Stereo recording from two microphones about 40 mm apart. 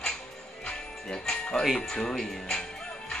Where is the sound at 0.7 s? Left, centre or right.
Left.